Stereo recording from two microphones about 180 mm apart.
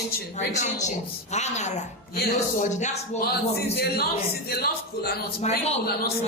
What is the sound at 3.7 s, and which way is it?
A man's voice, 60° left (ahead or behind).